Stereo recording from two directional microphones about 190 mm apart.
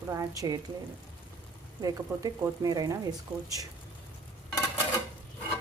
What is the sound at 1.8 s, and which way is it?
Speech, 20° right (ahead or behind).